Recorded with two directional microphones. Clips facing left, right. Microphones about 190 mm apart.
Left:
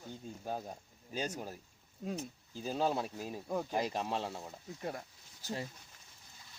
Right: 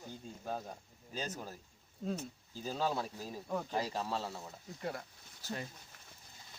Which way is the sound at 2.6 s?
15° left (ahead or behind).